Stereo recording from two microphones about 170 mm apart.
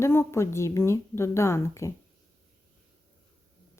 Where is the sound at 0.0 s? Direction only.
15° left (ahead or behind).